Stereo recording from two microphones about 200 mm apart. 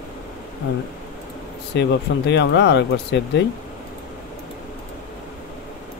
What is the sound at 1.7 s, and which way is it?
Speech, 60° left (ahead or behind).